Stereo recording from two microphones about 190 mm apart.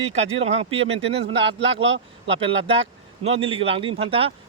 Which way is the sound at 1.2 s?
65° right (ahead or behind).